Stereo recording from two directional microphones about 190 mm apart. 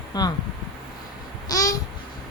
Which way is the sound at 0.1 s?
20° left (ahead or behind).